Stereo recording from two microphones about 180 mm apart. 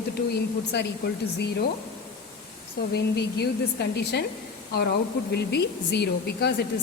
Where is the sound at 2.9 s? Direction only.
65° left (ahead or behind).